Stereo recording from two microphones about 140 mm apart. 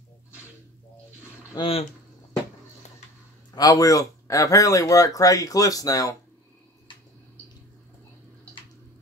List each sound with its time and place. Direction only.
1.6 s speech: 45° left (ahead or behind)
3.5 s speech: 25° left (ahead or behind)